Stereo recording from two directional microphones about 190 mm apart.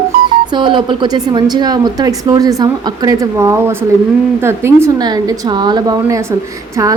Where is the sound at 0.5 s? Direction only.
25° right (ahead or behind).